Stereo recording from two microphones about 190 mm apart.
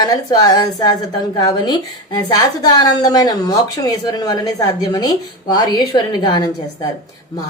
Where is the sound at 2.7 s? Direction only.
20° left (ahead or behind).